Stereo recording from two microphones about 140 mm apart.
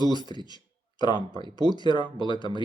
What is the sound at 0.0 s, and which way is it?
Speech, 30° left (ahead or behind).